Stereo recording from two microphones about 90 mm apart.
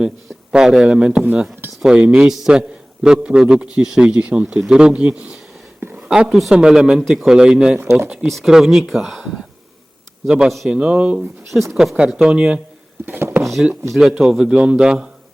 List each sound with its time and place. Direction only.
0.5 s a man's voice: 5° right (ahead or behind)
1.2 s a man's voice: 20° right (ahead or behind)
7.8 s speech: 25° right (ahead or behind)
8.3 s a man's voice: centre (ahead or behind)
11.7 s a man's voice: 5° right (ahead or behind)
13.1 s a sound: 25° right (ahead or behind)
14.1 s a man's voice: 10° right (ahead or behind)